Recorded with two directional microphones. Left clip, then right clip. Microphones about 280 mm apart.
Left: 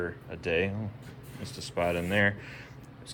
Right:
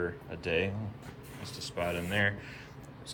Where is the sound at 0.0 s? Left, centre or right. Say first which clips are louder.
Left 1 dB; centre.